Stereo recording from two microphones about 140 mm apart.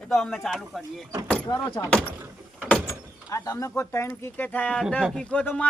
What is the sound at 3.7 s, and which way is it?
Speech, 15° left (ahead or behind).